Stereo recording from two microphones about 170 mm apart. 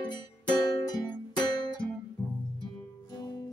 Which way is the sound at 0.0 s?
25° left (ahead or behind).